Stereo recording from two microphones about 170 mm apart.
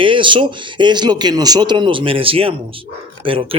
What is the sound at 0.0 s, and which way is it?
A man's voice, 30° right (ahead or behind).